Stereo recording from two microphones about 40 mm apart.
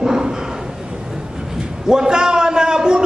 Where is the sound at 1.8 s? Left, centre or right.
Centre.